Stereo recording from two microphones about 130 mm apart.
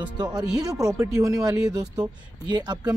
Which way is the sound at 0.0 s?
30° right (ahead or behind).